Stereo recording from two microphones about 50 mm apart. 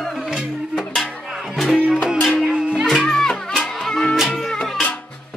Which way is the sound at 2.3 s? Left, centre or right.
Centre.